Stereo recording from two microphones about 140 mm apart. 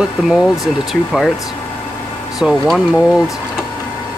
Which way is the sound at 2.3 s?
5° right (ahead or behind).